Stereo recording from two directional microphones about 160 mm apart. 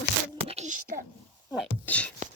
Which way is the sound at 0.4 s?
45° right (ahead or behind).